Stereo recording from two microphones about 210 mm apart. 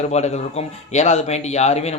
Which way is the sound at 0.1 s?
30° left (ahead or behind).